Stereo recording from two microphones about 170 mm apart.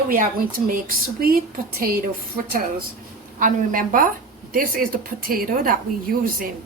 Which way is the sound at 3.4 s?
50° right (ahead or behind).